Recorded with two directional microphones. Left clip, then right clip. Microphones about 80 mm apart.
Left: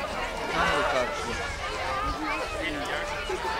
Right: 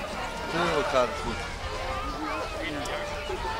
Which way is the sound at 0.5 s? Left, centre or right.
Left.